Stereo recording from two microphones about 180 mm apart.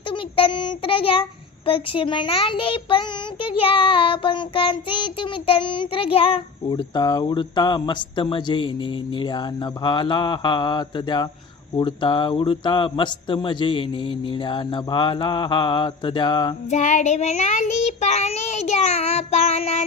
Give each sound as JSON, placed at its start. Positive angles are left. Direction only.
{"t": 0.1, "sound": "a child's voice", "side_deg": 30}
{"t": 16.6, "sound": "child singing", "side_deg": 40}